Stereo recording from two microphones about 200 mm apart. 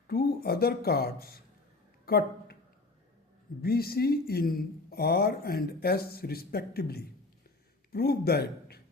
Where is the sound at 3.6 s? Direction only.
50° left (ahead or behind).